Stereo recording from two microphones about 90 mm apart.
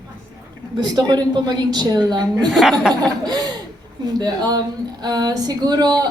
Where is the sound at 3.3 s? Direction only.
50° right (ahead or behind).